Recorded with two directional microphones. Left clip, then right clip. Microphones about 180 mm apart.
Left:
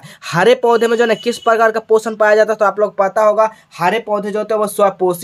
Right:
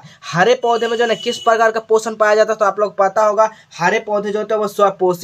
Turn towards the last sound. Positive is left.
turn(degrees=25)  # may be behind; listen again after turning